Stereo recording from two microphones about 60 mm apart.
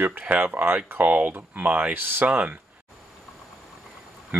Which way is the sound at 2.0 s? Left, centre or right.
Right.